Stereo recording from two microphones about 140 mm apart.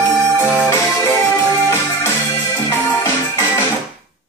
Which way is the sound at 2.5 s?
20° left (ahead or behind).